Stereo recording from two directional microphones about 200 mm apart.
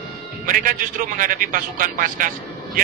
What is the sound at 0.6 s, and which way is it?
A man's voice, 45° right (ahead or behind).